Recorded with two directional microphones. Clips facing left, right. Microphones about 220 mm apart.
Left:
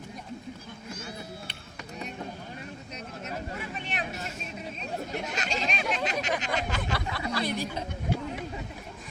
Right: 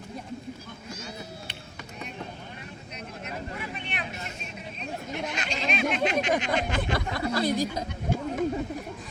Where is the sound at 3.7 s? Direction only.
45° left (ahead or behind).